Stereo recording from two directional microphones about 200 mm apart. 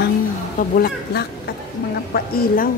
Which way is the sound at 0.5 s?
50° left (ahead or behind).